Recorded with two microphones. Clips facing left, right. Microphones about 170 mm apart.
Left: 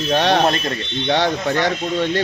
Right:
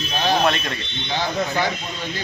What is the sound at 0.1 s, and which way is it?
A man's voice, 75° left (ahead or behind).